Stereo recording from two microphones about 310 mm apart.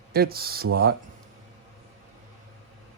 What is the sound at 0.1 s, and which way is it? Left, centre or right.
Speech, right.